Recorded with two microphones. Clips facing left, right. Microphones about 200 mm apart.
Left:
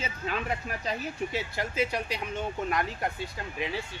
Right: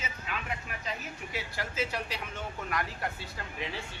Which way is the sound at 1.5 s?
15° left (ahead or behind).